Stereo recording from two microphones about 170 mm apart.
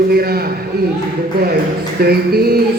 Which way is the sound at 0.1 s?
65° right (ahead or behind).